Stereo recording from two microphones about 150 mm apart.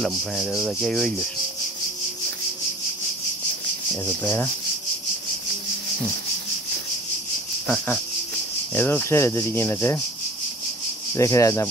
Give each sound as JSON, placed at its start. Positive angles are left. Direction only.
{"t": 0.0, "sound": "speech", "side_deg": 0}
{"t": 3.9, "sound": "speech", "side_deg": 15}
{"t": 7.6, "sound": "speech", "side_deg": 10}
{"t": 11.1, "sound": "speech", "side_deg": 20}